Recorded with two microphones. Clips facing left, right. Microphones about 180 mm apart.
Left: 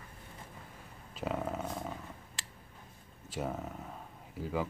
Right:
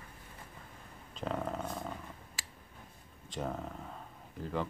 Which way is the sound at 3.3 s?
5° left (ahead or behind).